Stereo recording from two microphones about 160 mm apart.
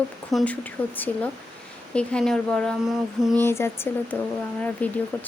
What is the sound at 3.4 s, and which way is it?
Speech, 15° left (ahead or behind).